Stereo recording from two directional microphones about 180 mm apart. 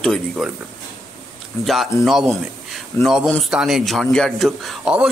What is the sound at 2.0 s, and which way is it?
A man's voice, centre (ahead or behind).